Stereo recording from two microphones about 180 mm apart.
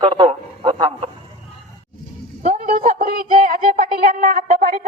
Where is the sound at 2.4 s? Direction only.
50° right (ahead or behind).